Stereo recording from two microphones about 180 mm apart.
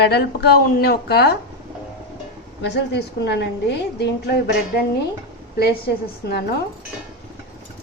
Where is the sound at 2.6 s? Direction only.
75° left (ahead or behind).